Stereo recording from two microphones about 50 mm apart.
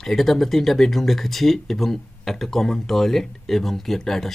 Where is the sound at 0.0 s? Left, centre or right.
Centre.